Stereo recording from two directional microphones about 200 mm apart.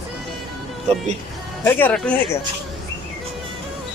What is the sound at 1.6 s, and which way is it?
Speech, 10° left (ahead or behind).